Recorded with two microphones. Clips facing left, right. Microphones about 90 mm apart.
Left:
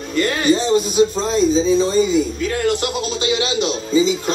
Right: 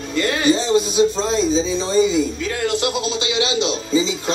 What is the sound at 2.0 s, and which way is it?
A man's voice, 45° left (ahead or behind).